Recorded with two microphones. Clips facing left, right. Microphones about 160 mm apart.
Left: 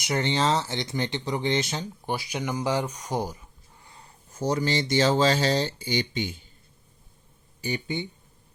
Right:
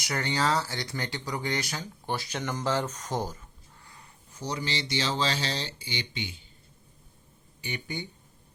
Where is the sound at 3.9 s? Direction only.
30° left (ahead or behind).